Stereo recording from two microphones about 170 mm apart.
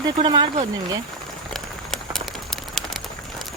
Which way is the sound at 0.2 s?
30° right (ahead or behind).